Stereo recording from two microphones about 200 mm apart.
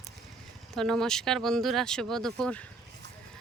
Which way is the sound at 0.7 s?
Centre (ahead or behind).